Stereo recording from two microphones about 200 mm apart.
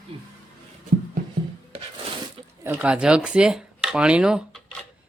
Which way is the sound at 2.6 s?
10° right (ahead or behind).